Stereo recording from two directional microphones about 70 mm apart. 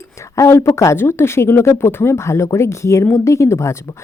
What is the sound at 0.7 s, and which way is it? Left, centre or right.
Speech, left.